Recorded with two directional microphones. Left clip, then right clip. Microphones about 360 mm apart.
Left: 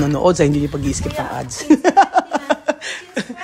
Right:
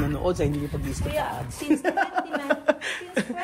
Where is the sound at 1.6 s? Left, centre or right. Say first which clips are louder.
Left 12 dB; centre.